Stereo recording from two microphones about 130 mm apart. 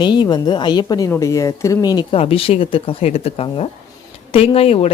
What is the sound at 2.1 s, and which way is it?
Speech, 45° left (ahead or behind).